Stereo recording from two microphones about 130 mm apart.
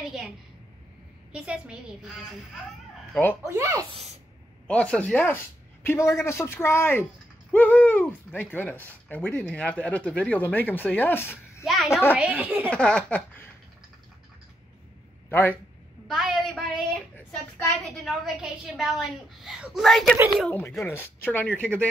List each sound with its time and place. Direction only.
1.3 s a woman's voice: 5° right (ahead or behind)
3.4 s speech: 25° right (ahead or behind)
4.6 s speech: 10° left (ahead or behind)
5.9 s a man's voice: 20° left (ahead or behind)
11.6 s a child's voice: centre (ahead or behind)
11.9 s speech: 15° left (ahead or behind)
12.2 s a woman's voice: 10° right (ahead or behind)
12.7 s speech: 5° left (ahead or behind)
15.2 s a man's voice: 15° left (ahead or behind)
16.1 s a woman's voice: centre (ahead or behind)
20.8 s speech: 15° left (ahead or behind)